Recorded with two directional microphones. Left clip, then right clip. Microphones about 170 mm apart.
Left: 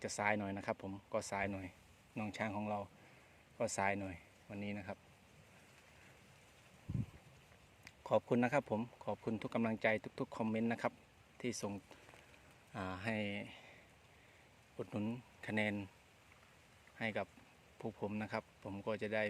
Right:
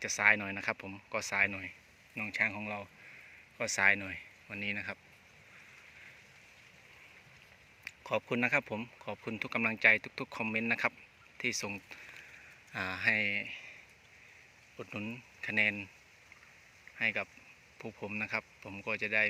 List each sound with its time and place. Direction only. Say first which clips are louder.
0.0 s speech: right 10 dB; 15° left (ahead or behind)
8.0 s speech: right 2 dB; 20° left (ahead or behind)
14.8 s speech: right 2 dB; 20° left (ahead or behind)
17.0 s speech: right 8 dB; 20° left (ahead or behind)